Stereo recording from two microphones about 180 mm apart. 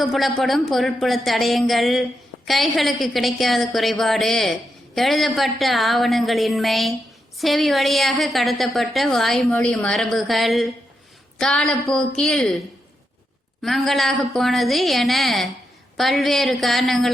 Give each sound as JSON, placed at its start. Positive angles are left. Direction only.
{"t": 0.0, "sound": "a woman's voice", "side_deg": 0}
{"t": 13.6, "sound": "a woman's voice", "side_deg": 0}